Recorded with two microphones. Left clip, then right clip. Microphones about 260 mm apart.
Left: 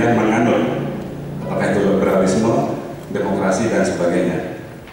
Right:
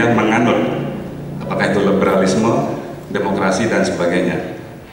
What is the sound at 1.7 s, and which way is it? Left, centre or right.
Speech, centre.